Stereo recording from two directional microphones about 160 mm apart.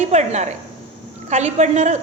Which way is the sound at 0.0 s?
45° right (ahead or behind).